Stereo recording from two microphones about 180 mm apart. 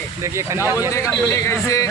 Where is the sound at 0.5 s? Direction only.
15° right (ahead or behind).